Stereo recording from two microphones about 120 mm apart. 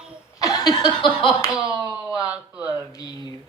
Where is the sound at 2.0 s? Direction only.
10° right (ahead or behind).